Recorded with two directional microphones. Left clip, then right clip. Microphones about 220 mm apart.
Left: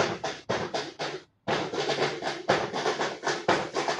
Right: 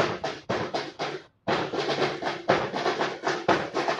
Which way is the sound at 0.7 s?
30° left (ahead or behind).